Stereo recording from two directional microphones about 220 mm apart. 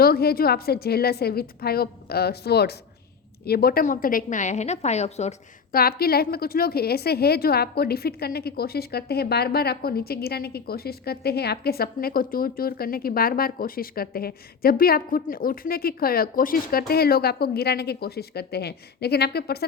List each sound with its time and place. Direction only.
0.0 s a woman's voice: 45° left (ahead or behind)
5.7 s a woman's voice: 45° left (ahead or behind)